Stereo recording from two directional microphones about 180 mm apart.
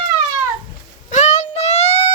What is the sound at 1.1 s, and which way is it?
Child singing, 40° left (ahead or behind).